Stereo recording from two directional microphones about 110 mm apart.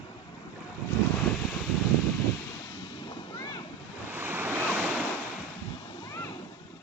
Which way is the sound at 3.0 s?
40° left (ahead or behind).